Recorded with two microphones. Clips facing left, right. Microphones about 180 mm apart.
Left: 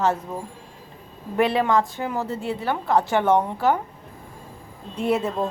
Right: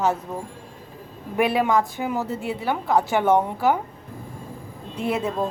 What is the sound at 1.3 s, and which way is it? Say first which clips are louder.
A woman's voice: even; 10° right (ahead or behind).